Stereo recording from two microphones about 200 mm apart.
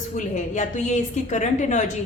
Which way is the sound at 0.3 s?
35° left (ahead or behind).